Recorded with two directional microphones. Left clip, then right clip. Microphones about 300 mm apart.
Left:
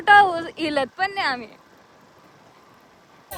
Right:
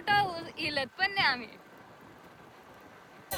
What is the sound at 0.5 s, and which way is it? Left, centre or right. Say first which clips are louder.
Speech: left 9 dB; left.